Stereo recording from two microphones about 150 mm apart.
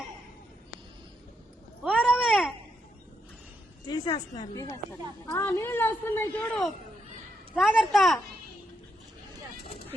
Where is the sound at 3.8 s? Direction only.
30° left (ahead or behind).